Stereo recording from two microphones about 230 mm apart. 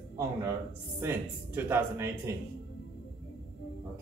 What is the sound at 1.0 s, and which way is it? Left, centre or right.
Speech, centre.